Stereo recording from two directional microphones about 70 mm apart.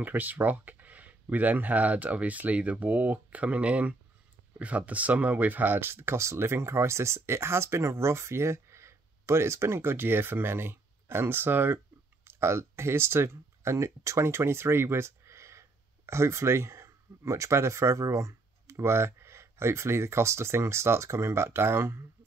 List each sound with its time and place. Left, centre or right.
0.0 s speech: right